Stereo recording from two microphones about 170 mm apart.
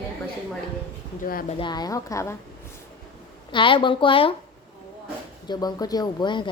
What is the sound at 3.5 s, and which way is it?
Speech, 30° left (ahead or behind).